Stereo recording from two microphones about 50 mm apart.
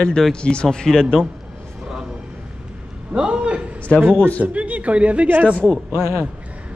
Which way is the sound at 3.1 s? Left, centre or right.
Right.